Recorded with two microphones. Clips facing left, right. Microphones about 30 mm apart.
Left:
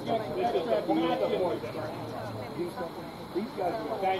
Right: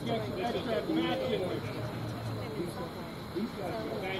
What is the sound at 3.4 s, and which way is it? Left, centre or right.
Speech, centre.